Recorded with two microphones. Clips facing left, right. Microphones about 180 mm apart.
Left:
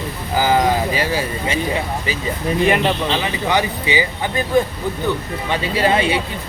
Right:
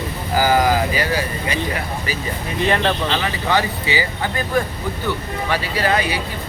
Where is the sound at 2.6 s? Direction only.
10° left (ahead or behind).